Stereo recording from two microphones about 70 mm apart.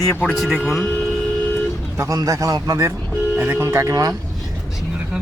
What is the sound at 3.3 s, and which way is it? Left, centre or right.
Speech, right.